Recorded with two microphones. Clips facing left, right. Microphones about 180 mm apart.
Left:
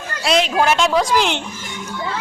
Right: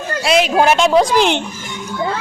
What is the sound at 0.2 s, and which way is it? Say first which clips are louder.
Speech: right 3 dB; 5° right (ahead or behind).